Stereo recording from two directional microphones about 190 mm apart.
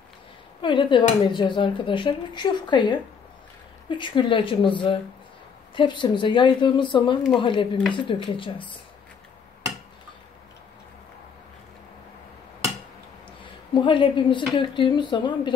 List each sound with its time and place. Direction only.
0.6 s speech: 25° left (ahead or behind)
13.7 s speech: 25° left (ahead or behind)